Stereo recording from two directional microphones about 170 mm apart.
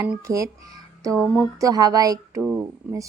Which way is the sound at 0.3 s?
20° right (ahead or behind).